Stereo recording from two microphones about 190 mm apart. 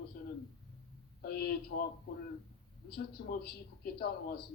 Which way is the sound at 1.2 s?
55° left (ahead or behind).